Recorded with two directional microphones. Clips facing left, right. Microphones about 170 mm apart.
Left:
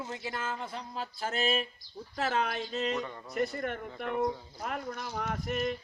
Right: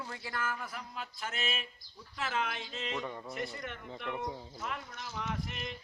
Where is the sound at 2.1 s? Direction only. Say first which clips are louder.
Left 5 dB; 40° left (ahead or behind).